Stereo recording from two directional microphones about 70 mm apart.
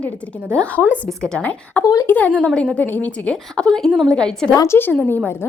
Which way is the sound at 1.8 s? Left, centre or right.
Left.